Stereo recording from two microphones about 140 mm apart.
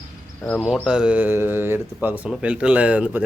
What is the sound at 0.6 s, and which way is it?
Speech, 5° right (ahead or behind).